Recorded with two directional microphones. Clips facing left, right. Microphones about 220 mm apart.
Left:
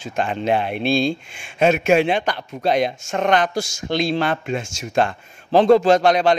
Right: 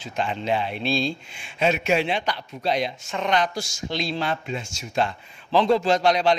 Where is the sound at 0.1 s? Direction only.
50° left (ahead or behind).